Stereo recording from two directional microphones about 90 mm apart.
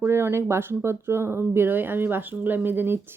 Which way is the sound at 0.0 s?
30° right (ahead or behind).